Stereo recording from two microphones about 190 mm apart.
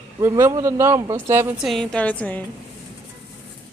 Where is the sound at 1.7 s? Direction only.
5° left (ahead or behind).